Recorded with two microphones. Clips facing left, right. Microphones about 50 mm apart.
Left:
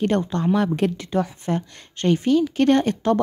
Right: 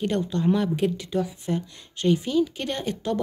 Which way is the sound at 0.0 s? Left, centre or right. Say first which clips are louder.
Left 3 dB; left.